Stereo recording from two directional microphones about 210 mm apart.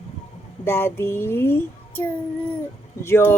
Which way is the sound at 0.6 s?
10° left (ahead or behind).